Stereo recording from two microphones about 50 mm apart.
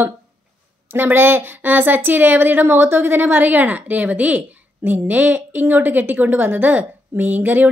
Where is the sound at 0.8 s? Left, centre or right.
Right.